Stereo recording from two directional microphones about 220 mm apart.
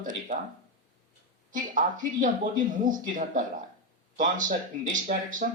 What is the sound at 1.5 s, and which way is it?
Speech, 35° right (ahead or behind).